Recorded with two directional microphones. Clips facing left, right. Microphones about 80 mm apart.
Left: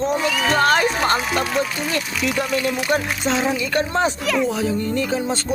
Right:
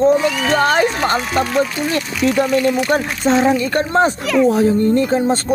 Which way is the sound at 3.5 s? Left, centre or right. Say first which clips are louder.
Right 5 dB; right.